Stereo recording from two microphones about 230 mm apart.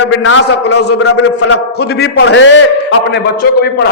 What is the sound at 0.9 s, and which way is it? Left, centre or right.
Speech, left.